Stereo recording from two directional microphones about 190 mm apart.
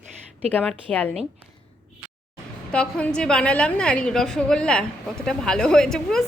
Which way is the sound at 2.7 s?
5° left (ahead or behind).